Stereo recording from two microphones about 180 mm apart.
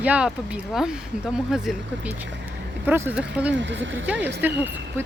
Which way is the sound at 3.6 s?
90° right.